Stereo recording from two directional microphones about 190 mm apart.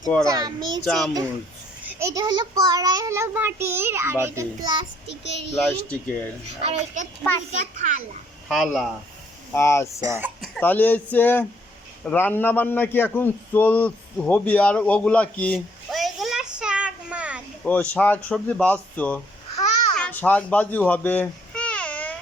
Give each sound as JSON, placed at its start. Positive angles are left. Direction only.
{"t": 0.3, "sound": "a child's voice", "side_deg": -20}
{"t": 0.9, "sound": "speech", "side_deg": 0}
{"t": 1.9, "sound": "child singing", "side_deg": -15}
{"t": 5.0, "sound": "a child's voice", "side_deg": 65}
{"t": 5.5, "sound": "speech", "side_deg": 5}
{"t": 6.6, "sound": "a child's voice", "side_deg": -35}
{"t": 8.4, "sound": "speech", "side_deg": 0}
{"t": 9.6, "sound": "speech", "side_deg": 15}
{"t": 10.0, "sound": "speech", "side_deg": -15}
{"t": 10.5, "sound": "a man's voice", "side_deg": 10}
{"t": 17.7, "sound": "speech", "side_deg": 10}
{"t": 20.0, "sound": "babbling", "side_deg": 10}